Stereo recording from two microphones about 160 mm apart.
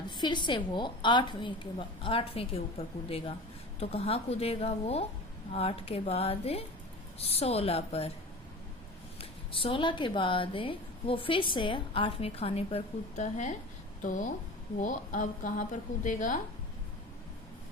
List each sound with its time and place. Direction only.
0.1 s a woman's voice: 30° left (ahead or behind)
9.5 s a woman's voice: 35° left (ahead or behind); by 16.4 s 55° left (ahead or behind)